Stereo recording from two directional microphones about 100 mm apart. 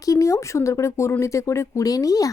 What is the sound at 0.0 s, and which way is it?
A woman's voice, 35° left (ahead or behind).